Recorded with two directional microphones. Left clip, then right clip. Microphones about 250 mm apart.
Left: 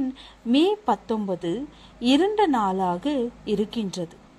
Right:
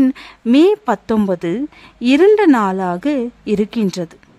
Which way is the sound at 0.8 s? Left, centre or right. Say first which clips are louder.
Right 7 dB; right.